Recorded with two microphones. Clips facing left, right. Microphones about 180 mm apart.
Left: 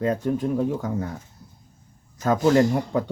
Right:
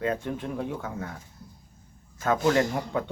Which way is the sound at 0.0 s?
40° left (ahead or behind).